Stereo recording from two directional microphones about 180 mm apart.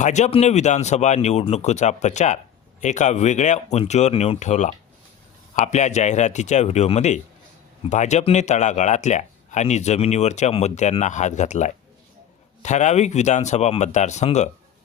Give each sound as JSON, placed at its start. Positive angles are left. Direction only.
{"t": 0.0, "sound": "speech", "side_deg": 40}